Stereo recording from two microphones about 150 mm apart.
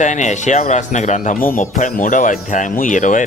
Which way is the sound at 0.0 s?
55° left (ahead or behind).